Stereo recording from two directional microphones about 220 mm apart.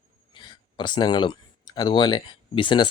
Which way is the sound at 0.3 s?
20° left (ahead or behind).